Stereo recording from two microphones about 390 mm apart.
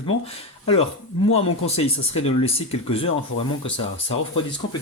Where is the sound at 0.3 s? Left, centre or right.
Centre.